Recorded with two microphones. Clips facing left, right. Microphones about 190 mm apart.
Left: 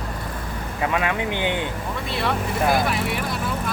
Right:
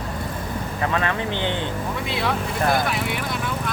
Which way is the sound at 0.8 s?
10° left (ahead or behind).